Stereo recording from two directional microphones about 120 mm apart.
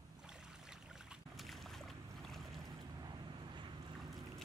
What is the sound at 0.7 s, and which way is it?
Boat, 5° right (ahead or behind).